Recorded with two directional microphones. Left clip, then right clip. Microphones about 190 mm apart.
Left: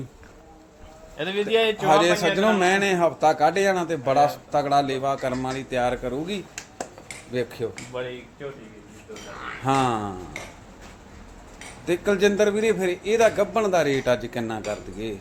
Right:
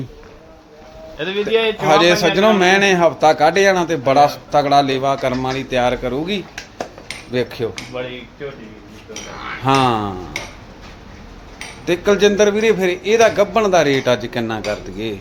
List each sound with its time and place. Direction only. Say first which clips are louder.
1.1 s speech: right 5 dB; 50° left (ahead or behind)
1.8 s a man's voice: right 8 dB; 5° right (ahead or behind)
9.6 s a man's voice: right 7 dB; 5° right (ahead or behind)
11.9 s a man's voice: right 7 dB; centre (ahead or behind)